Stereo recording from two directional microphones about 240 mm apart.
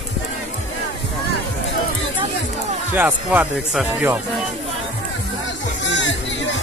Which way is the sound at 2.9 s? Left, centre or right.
Centre.